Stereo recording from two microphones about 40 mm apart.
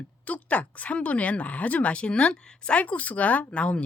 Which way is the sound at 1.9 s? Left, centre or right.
Left.